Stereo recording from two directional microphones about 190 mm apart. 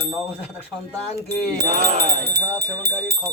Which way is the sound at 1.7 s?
55° right (ahead or behind).